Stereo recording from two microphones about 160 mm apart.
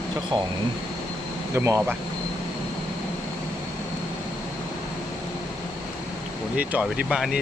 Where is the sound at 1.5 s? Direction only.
20° right (ahead or behind).